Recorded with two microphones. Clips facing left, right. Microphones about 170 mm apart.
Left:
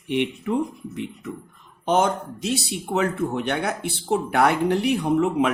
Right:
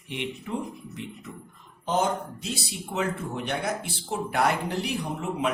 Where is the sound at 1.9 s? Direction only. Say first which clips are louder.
Left 5 dB; 75° left (ahead or behind).